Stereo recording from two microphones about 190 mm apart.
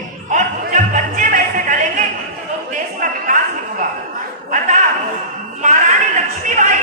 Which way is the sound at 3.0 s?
45° right (ahead or behind).